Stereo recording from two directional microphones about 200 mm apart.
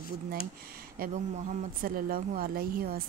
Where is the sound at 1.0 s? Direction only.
40° right (ahead or behind).